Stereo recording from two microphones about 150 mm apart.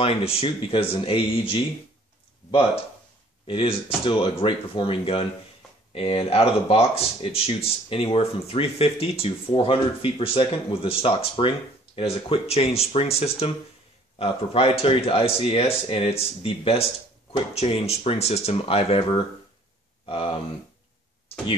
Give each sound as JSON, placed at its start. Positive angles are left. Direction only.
{"t": 0.0, "sound": "speech", "side_deg": 40}
{"t": 3.4, "sound": "speech", "side_deg": 35}